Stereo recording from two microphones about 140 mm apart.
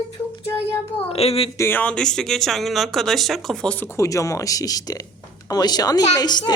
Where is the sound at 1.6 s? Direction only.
15° left (ahead or behind).